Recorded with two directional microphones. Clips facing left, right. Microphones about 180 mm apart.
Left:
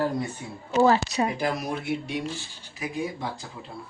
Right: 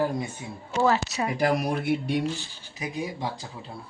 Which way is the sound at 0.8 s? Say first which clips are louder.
Left 3 dB; 30° left (ahead or behind).